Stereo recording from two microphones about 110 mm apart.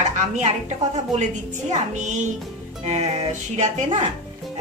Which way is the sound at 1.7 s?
90° right.